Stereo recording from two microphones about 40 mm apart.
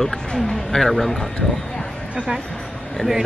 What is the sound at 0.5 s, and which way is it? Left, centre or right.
Speech, centre.